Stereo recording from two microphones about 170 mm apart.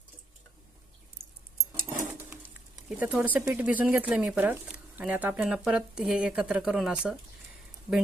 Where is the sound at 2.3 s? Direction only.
15° right (ahead or behind).